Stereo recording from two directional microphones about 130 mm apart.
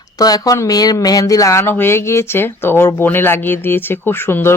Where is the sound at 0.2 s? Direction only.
30° left (ahead or behind).